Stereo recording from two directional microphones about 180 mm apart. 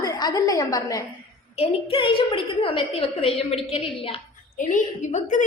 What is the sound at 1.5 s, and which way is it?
A woman's voice, 30° left (ahead or behind).